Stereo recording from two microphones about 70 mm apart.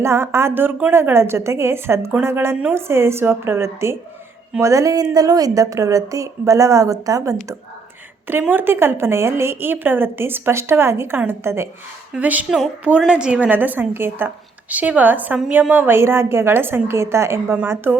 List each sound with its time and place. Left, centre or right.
0.0 s a woman's voice: right
4.6 s a woman's voice: right
8.3 s a woman's voice: right
12.1 s a woman's voice: right
12.5 s a sound: centre
13.1 s a woman's voice: centre
16.0 s a woman's voice: right
17.9 s a woman's voice: right